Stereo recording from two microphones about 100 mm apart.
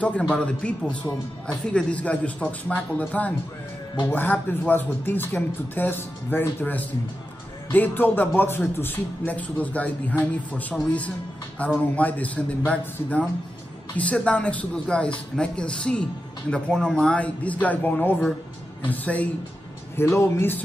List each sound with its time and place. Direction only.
0.3 s speech: 10° left (ahead or behind)